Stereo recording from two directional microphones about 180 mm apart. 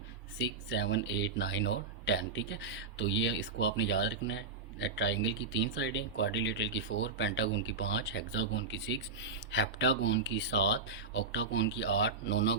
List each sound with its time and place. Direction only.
0.3 s speech: 75° left (ahead or behind)